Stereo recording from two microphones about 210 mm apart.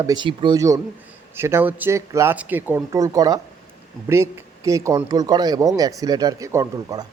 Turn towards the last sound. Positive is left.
turn(degrees=-15)  # may be behind; listen again after turning